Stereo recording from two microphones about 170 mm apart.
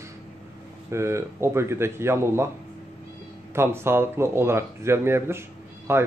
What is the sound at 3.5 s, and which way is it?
Speech, 15° right (ahead or behind).